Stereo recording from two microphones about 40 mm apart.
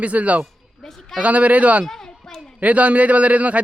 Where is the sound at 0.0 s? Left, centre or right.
Right.